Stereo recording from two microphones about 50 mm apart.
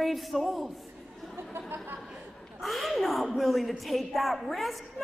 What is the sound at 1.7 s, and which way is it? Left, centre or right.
Speech, right.